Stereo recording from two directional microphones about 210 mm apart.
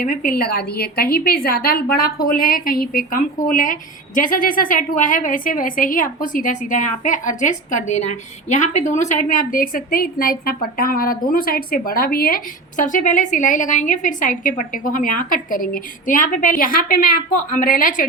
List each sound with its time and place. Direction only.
0.0 s a woman's voice: 40° left (ahead or behind)